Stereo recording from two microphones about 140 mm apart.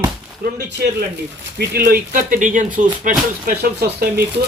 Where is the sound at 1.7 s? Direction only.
90° right; by 3.5 s 70° right (ahead or behind).